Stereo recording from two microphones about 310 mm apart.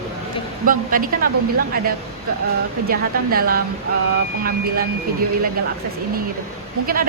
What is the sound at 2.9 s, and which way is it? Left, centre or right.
Speech, right.